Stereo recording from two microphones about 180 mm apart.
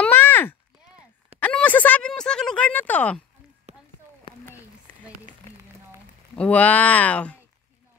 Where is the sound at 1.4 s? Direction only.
10° left (ahead or behind).